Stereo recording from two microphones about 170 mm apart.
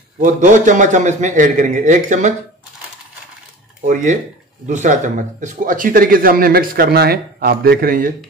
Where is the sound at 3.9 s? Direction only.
45° right (ahead or behind).